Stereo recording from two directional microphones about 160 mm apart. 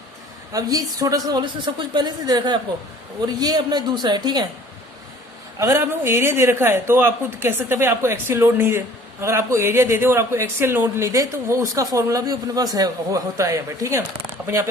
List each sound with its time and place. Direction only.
0.5 s a woman's voice: 25° right (ahead or behind)
5.5 s a man's voice: 15° right (ahead or behind)